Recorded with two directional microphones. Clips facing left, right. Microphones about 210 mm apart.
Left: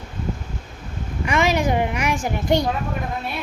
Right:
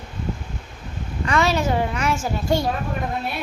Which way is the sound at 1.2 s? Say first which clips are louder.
Left 1 dB; 15° left (ahead or behind).